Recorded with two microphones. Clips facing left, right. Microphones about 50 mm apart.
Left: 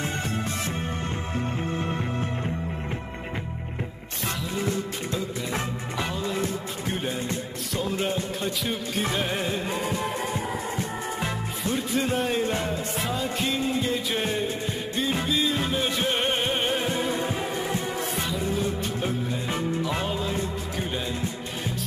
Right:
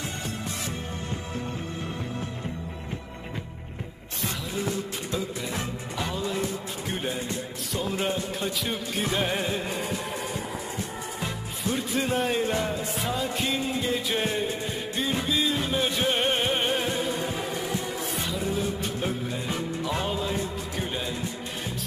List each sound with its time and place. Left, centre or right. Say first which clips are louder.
1.3 s music: left 4 dB; left
6.1 s music: right 1 dB; centre
7.7 s music: left 1 dB; centre
9.7 s music: left 3 dB; left
11.7 s music: left 1 dB; centre
17.6 s music: left 2 dB; left
17.9 s music: left 2 dB; centre